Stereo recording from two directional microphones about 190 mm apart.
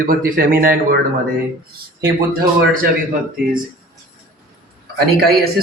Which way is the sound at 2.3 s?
50° right (ahead or behind).